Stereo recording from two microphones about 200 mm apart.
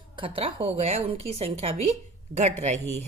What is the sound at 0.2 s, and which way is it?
A woman's voice, 30° right (ahead or behind).